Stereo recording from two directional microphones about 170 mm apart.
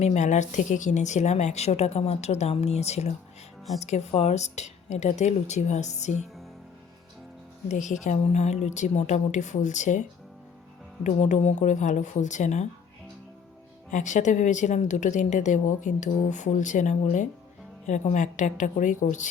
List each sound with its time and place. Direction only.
0.0 s speech: 45° left (ahead or behind)
7.7 s a woman's voice: 45° left (ahead or behind)
13.9 s a woman's voice: 45° left (ahead or behind)